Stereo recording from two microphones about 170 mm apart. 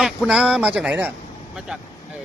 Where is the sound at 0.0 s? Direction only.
5° right (ahead or behind).